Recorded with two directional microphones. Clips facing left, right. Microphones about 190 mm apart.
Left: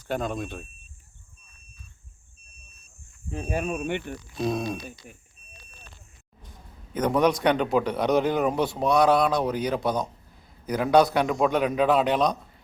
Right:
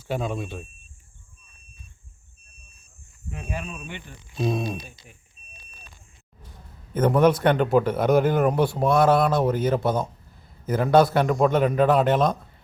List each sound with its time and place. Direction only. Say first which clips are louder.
0.1 s speech: right 1 dB; 5° right (ahead or behind)
3.2 s speech: left 5 dB; 35° left (ahead or behind); by 4.2 s 60° left (ahead or behind)
4.4 s a man's voice: right 1 dB; centre (ahead or behind)
7.0 s a man's voice: right 3 dB; 5° right (ahead or behind)